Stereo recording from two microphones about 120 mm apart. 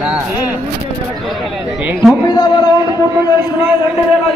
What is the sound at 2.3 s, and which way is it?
Speech, 35° left (ahead or behind).